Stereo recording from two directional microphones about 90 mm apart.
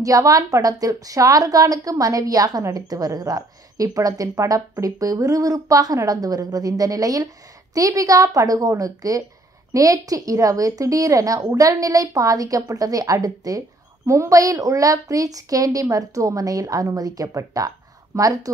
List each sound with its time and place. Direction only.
0.0 s a woman's voice: 40° right (ahead or behind)